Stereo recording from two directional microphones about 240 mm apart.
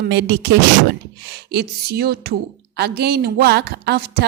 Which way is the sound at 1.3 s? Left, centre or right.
Right.